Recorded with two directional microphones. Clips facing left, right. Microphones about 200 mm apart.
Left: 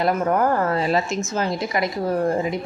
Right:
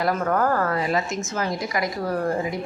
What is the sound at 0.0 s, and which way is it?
Speech, 20° left (ahead or behind).